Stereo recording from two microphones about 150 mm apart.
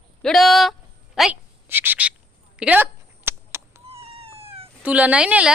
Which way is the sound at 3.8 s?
40° right (ahead or behind).